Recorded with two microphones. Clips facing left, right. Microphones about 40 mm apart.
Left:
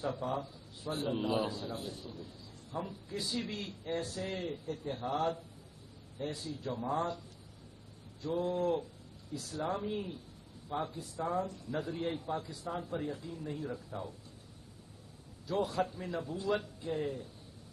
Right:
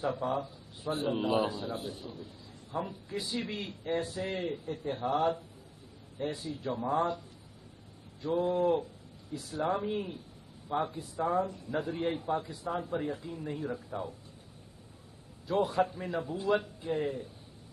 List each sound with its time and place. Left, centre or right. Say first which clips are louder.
0.0 s a man's voice: right 4 dB; centre
8.2 s a man's voice: right 4 dB; centre
15.4 s a man's voice: right 4 dB; right